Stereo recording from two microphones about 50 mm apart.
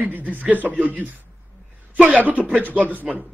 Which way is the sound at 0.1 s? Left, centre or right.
Right.